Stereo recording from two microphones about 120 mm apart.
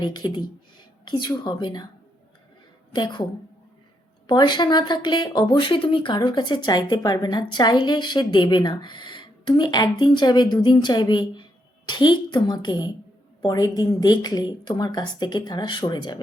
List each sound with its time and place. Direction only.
0.0 s speech: 40° left (ahead or behind)
2.9 s speech: 40° left (ahead or behind)
4.3 s speech: 40° left (ahead or behind)